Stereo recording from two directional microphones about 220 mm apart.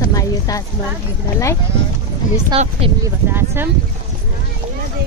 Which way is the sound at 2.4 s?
25° right (ahead or behind).